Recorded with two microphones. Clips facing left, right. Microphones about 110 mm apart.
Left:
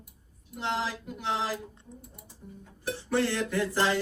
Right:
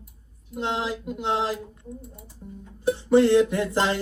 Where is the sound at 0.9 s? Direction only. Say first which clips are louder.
Right 6 dB; 20° right (ahead or behind).